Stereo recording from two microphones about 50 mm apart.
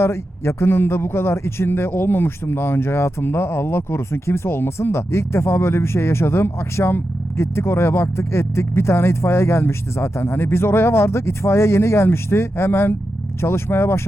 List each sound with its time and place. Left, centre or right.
0.0 s speech: left